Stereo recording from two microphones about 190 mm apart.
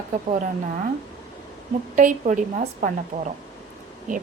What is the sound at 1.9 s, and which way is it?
A woman's voice, 40° right (ahead or behind).